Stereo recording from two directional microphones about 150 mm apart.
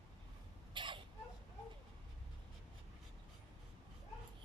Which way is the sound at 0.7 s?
35° right (ahead or behind).